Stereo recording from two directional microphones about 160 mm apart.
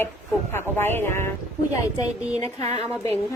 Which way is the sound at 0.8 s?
15° left (ahead or behind).